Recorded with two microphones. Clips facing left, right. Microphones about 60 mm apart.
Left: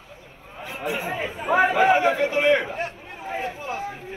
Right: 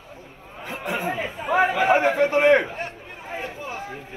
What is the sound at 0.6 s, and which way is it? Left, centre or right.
Speech, right.